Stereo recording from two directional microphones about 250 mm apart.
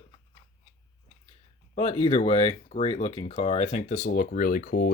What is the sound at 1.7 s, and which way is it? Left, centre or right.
Speech, left.